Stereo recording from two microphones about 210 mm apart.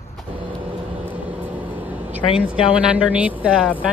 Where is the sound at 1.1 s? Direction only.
5° right (ahead or behind).